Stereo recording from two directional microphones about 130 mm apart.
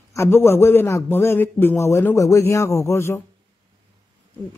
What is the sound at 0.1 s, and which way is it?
Speech, 20° left (ahead or behind).